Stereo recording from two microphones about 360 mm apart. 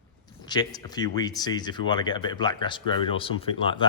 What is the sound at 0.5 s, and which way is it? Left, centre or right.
Speech, centre.